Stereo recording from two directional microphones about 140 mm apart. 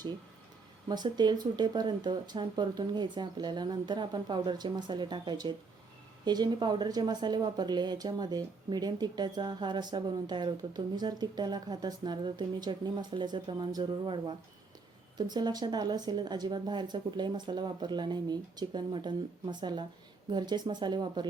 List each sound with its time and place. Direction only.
0.9 s speech: 30° right (ahead or behind)